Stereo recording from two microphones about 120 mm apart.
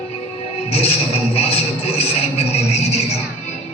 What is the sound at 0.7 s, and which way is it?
Music, 55° left (ahead or behind).